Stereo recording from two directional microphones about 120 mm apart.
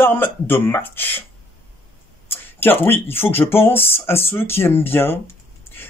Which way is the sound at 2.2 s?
20° left (ahead or behind).